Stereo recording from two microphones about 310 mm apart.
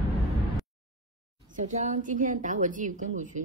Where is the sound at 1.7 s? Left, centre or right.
Right.